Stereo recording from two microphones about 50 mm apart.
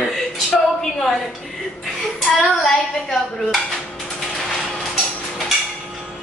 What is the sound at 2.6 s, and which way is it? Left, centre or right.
Speech, centre.